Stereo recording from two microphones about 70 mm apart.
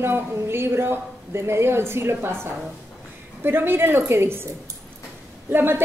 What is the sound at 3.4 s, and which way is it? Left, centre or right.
A woman's voice, right.